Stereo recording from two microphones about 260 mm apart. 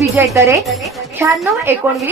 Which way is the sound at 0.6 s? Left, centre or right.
Centre.